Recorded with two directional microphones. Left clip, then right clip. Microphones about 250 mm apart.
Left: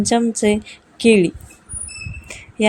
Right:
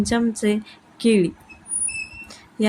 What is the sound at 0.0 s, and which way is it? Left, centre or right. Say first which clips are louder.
Speech: left 5 dB; centre.